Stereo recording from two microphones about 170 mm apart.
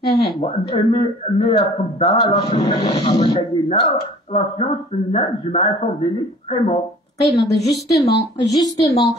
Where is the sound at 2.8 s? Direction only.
40° left (ahead or behind).